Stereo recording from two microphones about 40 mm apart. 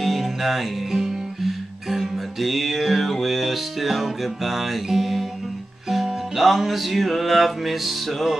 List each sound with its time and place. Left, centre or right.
0.0 s music: centre
6.3 s music: centre